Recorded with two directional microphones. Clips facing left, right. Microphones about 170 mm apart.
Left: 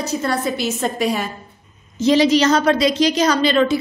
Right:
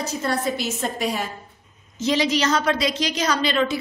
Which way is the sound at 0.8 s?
85° left.